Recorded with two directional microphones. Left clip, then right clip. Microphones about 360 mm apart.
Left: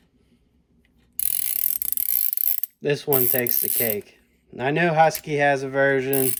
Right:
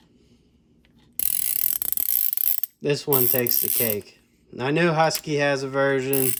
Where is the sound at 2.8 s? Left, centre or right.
Centre.